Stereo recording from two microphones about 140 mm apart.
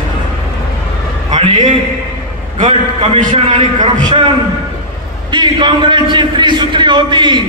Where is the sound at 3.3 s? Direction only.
35° right (ahead or behind).